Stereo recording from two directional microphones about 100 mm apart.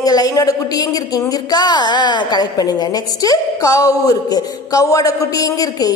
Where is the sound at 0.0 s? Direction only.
40° left (ahead or behind).